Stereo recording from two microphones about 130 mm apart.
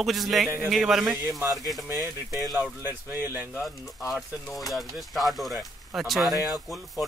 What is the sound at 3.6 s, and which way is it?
Speech, centre (ahead or behind).